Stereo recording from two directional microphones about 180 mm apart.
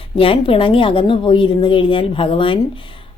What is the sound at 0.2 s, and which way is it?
Speech, 30° left (ahead or behind).